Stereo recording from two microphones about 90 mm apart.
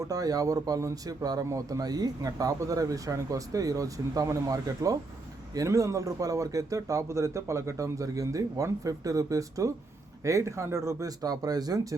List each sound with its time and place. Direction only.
0.0 s a man's voice: 40° right (ahead or behind)